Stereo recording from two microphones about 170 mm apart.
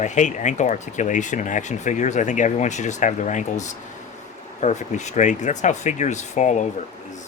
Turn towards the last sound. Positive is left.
turn(degrees=45)  # may be behind; listen again after turning